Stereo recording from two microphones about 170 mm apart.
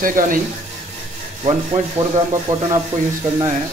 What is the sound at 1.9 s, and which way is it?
Speech, 25° right (ahead or behind).